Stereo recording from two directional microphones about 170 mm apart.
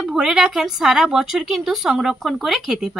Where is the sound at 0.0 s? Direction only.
5° right (ahead or behind).